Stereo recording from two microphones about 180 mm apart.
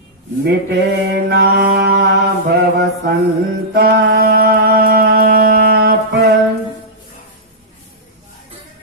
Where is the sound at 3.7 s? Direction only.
65° right (ahead or behind).